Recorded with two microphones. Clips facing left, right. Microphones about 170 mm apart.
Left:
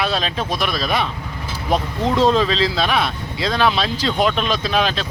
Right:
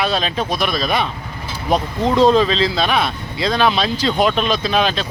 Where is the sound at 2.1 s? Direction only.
Centre (ahead or behind).